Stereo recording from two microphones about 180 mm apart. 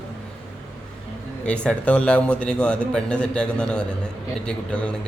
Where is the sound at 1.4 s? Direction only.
5° left (ahead or behind).